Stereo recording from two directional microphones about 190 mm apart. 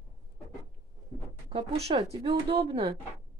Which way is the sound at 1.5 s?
30° right (ahead or behind).